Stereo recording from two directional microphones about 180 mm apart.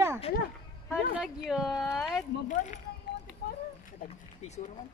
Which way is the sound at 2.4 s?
40° left (ahead or behind).